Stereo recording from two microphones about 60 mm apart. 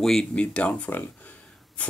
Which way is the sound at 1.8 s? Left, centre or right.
Left.